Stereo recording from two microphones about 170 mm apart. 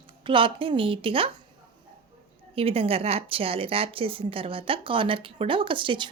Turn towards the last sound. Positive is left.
turn(degrees=-30)  # may be behind; listen again after turning